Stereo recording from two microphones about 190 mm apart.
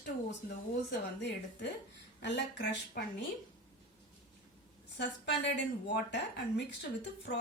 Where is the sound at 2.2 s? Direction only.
65° left (ahead or behind).